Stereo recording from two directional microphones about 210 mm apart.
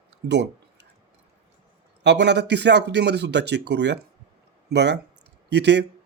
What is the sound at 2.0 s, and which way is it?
Speech, 55° right (ahead or behind).